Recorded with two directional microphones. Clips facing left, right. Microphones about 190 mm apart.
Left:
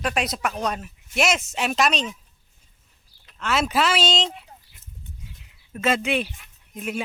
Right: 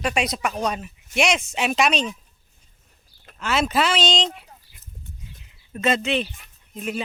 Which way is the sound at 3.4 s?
Centre (ahead or behind).